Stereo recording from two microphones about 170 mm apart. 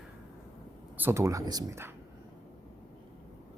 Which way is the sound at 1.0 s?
15° right (ahead or behind).